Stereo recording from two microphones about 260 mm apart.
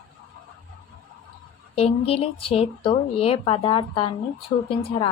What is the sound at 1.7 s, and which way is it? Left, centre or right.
A woman's voice, left.